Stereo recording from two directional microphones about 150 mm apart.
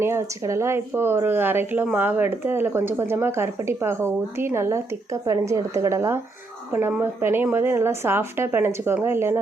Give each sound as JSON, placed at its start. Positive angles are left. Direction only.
{"t": 0.0, "sound": "speech", "side_deg": -20}